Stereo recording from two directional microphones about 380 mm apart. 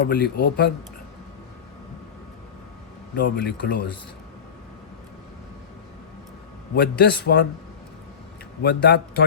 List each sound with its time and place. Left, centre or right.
0.0 s a man's voice: left
3.2 s a man's voice: left
6.7 s a man's voice: left
8.6 s a man's voice: left